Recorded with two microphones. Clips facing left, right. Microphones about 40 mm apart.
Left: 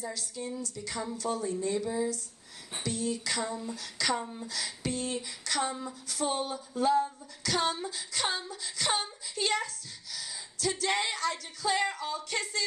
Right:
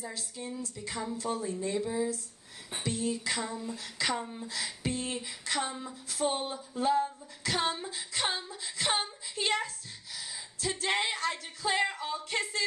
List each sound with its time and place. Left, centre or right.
0.0 s female singing: right
1.4 s speech: centre
2.8 s female singing: right
3.4 s speech: centre
3.7 s female singing: right
5.6 s speech: centre
6.0 s female singing: right
10.1 s speech: right
12.3 s female singing: right